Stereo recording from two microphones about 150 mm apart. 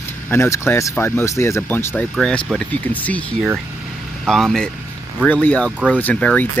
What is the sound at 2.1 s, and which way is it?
Speech, 5° left (ahead or behind).